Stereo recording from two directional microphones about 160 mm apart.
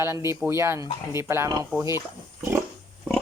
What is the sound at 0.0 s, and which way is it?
Speech, 15° right (ahead or behind).